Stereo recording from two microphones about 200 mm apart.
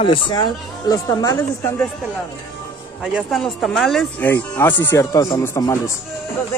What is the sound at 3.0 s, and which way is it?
Speech, centre (ahead or behind).